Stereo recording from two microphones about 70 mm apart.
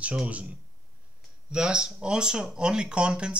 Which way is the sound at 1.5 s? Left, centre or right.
Centre.